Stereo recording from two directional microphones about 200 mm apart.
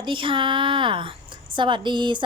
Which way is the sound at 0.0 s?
25° right (ahead or behind).